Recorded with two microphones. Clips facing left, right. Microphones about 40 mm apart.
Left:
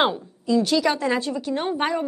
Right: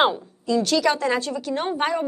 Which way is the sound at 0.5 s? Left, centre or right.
Centre.